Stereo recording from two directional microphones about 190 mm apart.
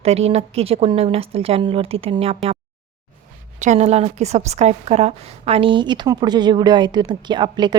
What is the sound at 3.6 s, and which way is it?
A woman's voice, 35° right (ahead or behind).